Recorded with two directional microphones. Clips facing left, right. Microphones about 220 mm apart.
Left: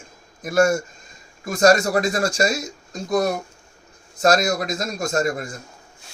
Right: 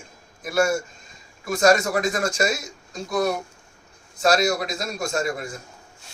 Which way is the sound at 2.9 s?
45° left (ahead or behind).